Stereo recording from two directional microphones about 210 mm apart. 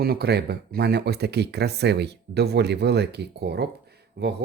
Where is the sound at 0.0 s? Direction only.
50° right (ahead or behind).